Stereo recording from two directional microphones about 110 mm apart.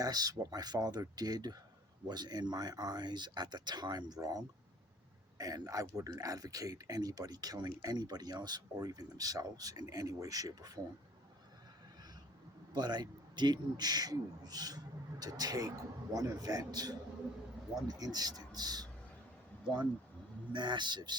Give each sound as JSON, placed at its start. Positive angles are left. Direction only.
{"t": 0.0, "sound": "speech", "side_deg": -35}
{"t": 12.7, "sound": "speech", "side_deg": -40}
{"t": 20.5, "sound": "speech", "side_deg": -45}